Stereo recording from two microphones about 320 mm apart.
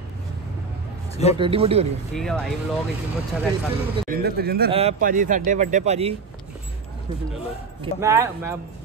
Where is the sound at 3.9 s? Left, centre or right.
Right.